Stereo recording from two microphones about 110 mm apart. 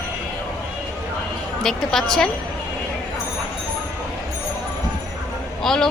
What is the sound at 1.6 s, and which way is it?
Speech, 5° left (ahead or behind).